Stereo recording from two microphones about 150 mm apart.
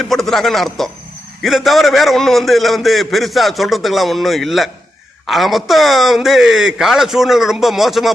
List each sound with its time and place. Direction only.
0.0 s a man's voice: centre (ahead or behind)